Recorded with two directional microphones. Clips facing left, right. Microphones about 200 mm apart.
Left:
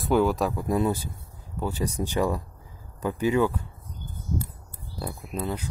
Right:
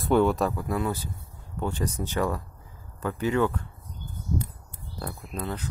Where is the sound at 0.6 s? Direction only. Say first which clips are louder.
Left 4 dB; 20° left (ahead or behind).